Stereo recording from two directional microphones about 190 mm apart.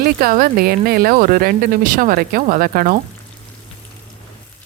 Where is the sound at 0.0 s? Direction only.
50° right (ahead or behind).